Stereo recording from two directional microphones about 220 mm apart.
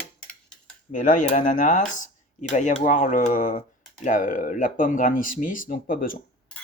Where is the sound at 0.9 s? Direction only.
35° left (ahead or behind).